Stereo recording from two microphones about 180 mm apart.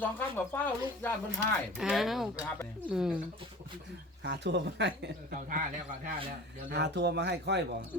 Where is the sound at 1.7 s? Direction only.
Centre (ahead or behind).